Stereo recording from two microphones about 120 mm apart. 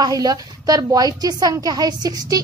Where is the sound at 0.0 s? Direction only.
30° right (ahead or behind).